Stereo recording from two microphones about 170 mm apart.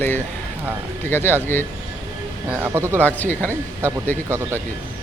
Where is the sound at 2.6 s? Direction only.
15° right (ahead or behind).